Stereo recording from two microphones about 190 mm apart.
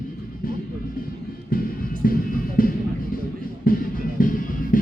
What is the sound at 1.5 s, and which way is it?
Music, 50° left (ahead or behind).